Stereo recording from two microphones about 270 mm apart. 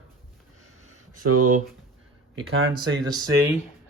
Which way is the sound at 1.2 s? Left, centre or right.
Right.